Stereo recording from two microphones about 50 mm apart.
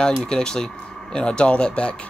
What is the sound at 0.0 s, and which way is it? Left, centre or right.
Speech, centre.